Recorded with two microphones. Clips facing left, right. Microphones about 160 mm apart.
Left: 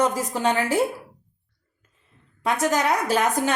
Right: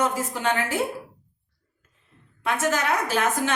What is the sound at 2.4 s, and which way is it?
Speech, 40° left (ahead or behind).